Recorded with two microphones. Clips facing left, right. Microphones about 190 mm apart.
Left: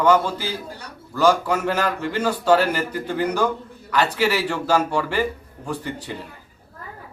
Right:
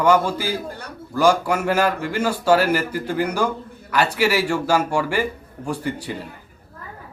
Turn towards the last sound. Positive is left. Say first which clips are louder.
# right 3 dB
turn(degrees=-10)  # may be behind; listen again after turning